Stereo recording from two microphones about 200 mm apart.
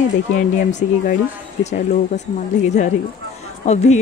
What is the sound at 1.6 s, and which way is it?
Speech, 35° left (ahead or behind).